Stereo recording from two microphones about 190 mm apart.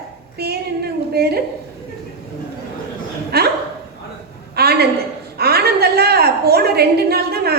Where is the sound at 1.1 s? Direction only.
55° right (ahead or behind).